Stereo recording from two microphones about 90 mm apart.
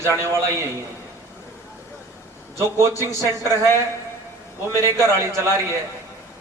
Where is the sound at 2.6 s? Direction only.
30° right (ahead or behind).